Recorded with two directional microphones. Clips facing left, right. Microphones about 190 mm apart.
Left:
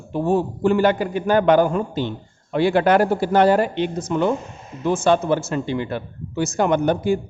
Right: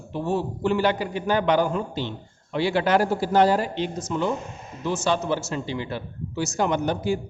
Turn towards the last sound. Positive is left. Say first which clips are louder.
# left 5 dB
turn(degrees=55)  # may be behind; listen again after turning